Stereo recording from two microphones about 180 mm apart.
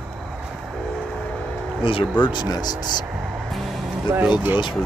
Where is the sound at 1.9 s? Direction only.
30° left (ahead or behind).